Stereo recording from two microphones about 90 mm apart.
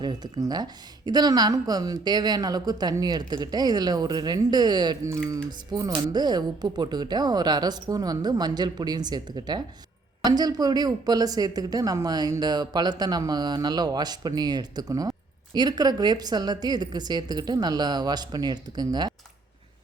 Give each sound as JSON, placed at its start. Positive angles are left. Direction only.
{"t": 0.0, "sound": "a woman's voice", "side_deg": -55}